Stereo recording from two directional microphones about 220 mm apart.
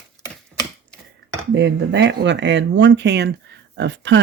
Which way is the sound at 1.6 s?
50° right (ahead or behind).